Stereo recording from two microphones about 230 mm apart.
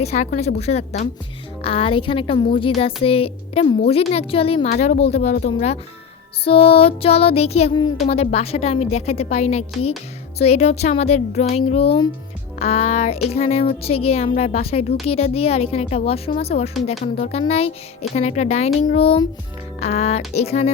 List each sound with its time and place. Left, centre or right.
0.0 s a woman's voice: left